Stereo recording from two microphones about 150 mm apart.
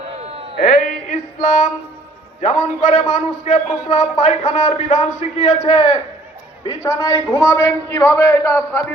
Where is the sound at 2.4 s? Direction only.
50° left (ahead or behind).